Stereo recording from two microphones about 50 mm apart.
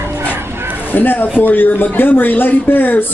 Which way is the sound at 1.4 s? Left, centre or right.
Left.